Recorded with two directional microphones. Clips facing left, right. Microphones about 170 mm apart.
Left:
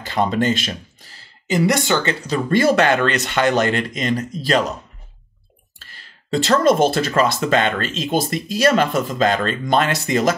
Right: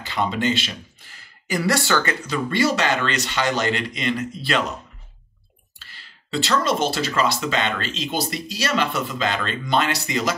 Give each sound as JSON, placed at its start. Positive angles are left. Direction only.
{"t": 0.0, "sound": "speech", "side_deg": 45}
{"t": 1.1, "sound": "speech", "side_deg": 25}
{"t": 2.2, "sound": "speech", "side_deg": 35}
{"t": 2.6, "sound": "speech", "side_deg": 55}
{"t": 5.8, "sound": "speech", "side_deg": 45}